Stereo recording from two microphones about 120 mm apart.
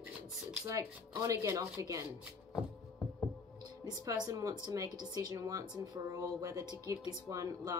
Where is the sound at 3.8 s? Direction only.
35° right (ahead or behind).